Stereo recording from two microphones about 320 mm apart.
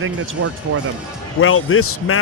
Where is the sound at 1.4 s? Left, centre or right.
Left.